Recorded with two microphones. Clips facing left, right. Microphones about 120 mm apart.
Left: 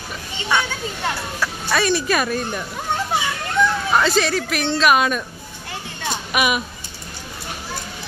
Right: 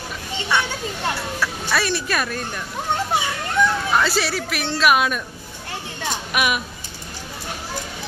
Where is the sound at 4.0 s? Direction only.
5° right (ahead or behind).